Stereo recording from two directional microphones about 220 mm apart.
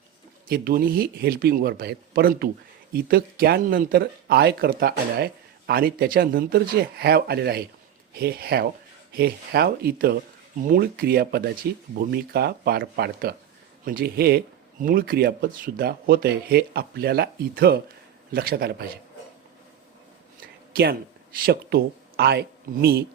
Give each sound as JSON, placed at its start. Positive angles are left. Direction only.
{"t": 0.4, "sound": "speech", "side_deg": -40}
{"t": 21.4, "sound": "speech", "side_deg": -45}